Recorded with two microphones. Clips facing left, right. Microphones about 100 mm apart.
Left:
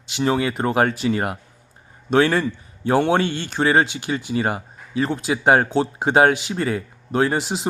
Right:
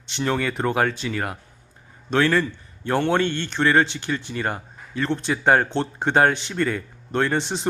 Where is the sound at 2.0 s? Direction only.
15° left (ahead or behind).